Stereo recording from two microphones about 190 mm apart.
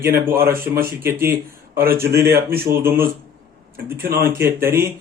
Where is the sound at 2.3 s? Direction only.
55° right (ahead or behind).